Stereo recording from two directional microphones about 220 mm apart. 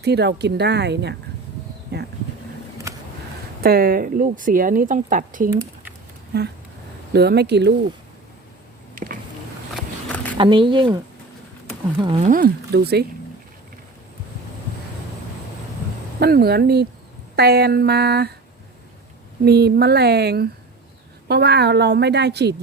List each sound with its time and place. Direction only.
0.0 s a woman's voice: 50° right (ahead or behind)
3.6 s speech: 45° right (ahead or behind)
5.5 s typing: 10° right (ahead or behind)
6.3 s a woman's voice: 50° right (ahead or behind)
10.3 s speech: 20° right (ahead or behind)
12.2 s a woman's voice: 40° right (ahead or behind)
16.2 s a woman's voice: 45° right (ahead or behind)
19.5 s a woman's voice: 45° right (ahead or behind)